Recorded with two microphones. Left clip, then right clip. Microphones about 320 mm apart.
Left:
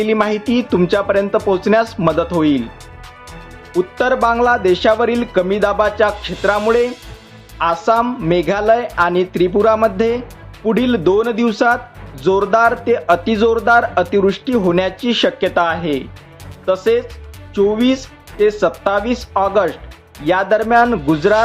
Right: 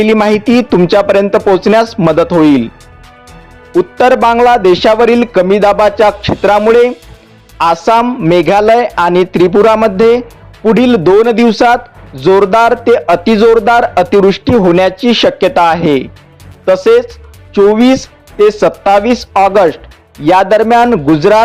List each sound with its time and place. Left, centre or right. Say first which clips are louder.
0.0 s music: right 7 dB; right
3.9 s music: right 7 dB; right
16.6 s speech: right 8 dB; right
18.8 s music: right 9 dB; right